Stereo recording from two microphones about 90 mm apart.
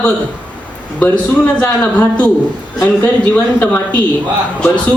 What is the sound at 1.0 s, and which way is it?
Speech, 15° left (ahead or behind).